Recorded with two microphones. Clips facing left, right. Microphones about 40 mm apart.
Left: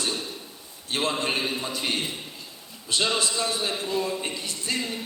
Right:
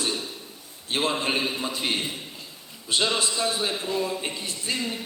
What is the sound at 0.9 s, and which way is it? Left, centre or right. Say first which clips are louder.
A man's voice: right 1 dB; centre.